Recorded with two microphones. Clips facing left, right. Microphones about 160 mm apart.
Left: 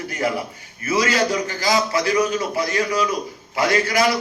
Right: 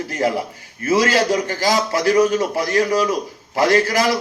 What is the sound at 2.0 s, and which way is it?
A man's voice, 45° right (ahead or behind).